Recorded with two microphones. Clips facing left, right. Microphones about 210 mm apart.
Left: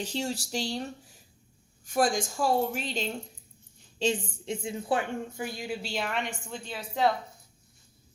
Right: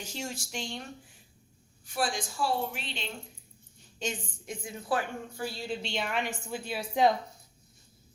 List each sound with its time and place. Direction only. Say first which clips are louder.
0.0 s a woman's voice: left 6 dB; 35° left (ahead or behind)
3.9 s a woman's voice: left 8 dB; 30° left (ahead or behind); by 6.8 s 10° right (ahead or behind)